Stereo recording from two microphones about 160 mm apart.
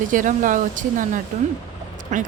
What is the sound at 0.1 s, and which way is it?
Speech, 55° right (ahead or behind).